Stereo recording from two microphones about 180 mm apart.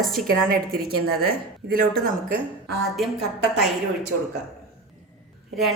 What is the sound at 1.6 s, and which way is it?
Speech, 55° right (ahead or behind).